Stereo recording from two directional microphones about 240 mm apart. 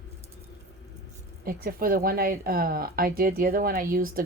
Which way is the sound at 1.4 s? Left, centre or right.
Right.